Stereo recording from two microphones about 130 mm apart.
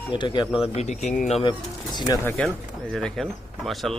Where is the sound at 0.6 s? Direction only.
55° left (ahead or behind).